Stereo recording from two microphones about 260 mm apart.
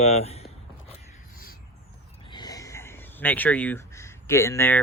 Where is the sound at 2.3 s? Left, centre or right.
Centre.